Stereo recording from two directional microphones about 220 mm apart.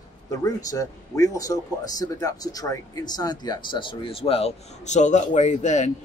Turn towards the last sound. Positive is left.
turn(degrees=30)  # may be behind; listen again after turning